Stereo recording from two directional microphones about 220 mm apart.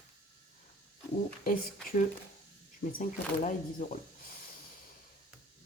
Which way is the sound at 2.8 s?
35° left (ahead or behind).